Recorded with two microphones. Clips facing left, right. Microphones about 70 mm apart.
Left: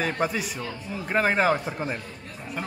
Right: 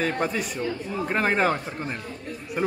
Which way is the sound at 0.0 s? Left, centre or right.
Centre.